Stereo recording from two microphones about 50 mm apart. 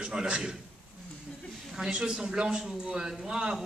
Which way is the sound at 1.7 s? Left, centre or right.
Centre.